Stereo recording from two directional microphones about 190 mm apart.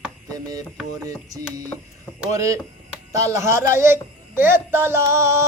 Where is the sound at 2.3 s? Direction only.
15° right (ahead or behind).